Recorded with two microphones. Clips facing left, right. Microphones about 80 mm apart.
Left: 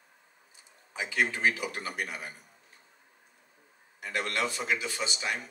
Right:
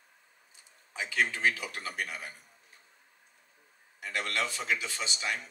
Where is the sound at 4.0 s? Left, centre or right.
Centre.